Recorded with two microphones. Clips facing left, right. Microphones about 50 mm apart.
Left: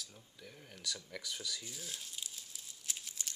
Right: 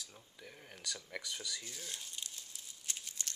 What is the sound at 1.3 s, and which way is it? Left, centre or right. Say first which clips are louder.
Crumpling: even; centre.